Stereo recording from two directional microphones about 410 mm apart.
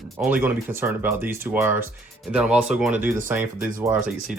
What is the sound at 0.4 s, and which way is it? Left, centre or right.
Speech, centre.